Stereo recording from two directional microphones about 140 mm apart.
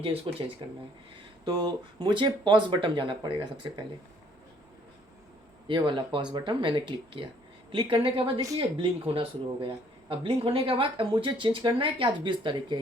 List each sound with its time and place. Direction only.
0.3 s speech: 40° right (ahead or behind)
5.6 s speech: 35° right (ahead or behind)